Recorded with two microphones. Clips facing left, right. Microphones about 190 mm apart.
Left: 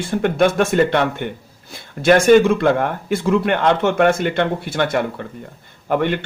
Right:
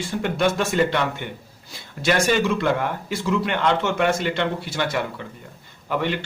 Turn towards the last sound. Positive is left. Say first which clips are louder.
# left 6 dB
turn(degrees=55)  # may be behind; listen again after turning